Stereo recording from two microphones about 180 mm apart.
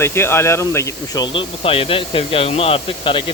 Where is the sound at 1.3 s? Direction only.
30° left (ahead or behind).